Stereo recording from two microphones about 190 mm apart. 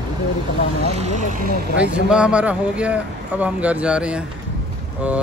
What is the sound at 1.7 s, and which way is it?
Speech, 5° right (ahead or behind).